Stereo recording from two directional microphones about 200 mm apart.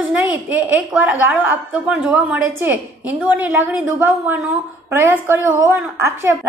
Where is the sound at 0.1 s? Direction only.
5° right (ahead or behind).